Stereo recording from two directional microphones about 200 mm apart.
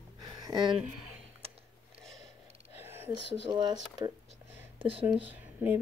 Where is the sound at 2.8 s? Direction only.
10° right (ahead or behind).